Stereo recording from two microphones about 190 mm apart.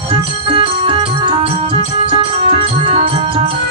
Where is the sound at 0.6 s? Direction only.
25° right (ahead or behind).